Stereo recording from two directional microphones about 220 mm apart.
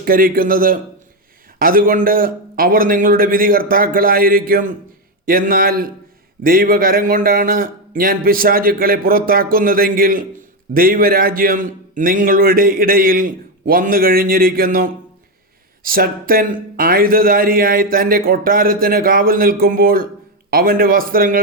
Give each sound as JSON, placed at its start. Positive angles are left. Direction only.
{"t": 0.0, "sound": "speech", "side_deg": -40}